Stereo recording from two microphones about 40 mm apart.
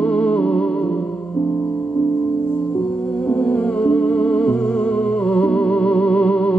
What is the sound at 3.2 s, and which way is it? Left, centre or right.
Music, left.